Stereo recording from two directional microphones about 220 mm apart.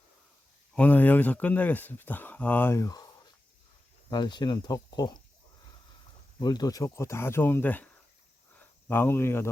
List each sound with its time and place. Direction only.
0.7 s speech: 5° left (ahead or behind)
4.1 s speech: 20° left (ahead or behind)
6.4 s speech: 20° left (ahead or behind)